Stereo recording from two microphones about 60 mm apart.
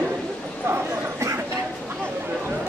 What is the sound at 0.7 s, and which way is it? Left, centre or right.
Bow-wow, right.